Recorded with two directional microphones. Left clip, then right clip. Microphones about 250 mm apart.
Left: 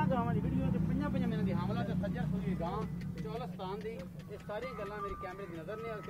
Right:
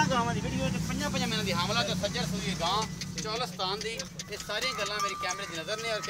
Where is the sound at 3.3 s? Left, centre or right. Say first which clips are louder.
Right 9 dB; right.